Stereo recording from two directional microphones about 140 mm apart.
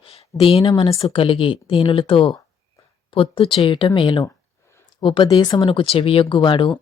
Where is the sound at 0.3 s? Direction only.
40° left (ahead or behind).